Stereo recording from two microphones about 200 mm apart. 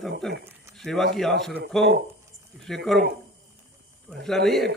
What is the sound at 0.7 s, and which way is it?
Speech, centre (ahead or behind).